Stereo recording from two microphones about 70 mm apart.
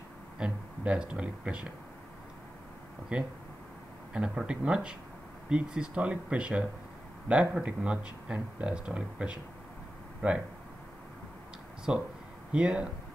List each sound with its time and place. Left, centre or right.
0.4 s speech: centre
3.1 s speech: centre
11.9 s speech: centre